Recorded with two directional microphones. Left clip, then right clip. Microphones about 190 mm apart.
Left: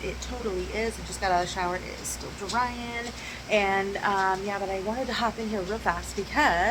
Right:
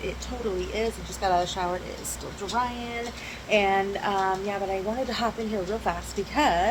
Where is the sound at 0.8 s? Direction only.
Centre (ahead or behind).